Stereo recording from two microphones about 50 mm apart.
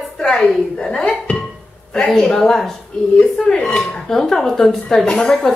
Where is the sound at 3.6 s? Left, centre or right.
Centre.